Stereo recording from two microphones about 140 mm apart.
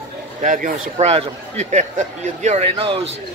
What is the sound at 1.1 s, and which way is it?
Speech, 55° right (ahead or behind).